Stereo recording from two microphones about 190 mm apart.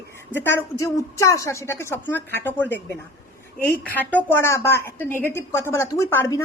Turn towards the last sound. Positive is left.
turn(degrees=15)  # may be behind; listen again after turning